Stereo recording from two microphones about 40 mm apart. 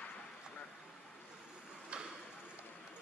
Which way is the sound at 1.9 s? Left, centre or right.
Right.